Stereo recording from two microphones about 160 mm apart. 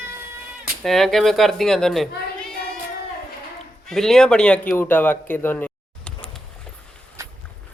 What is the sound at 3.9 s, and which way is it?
Speech, centre (ahead or behind).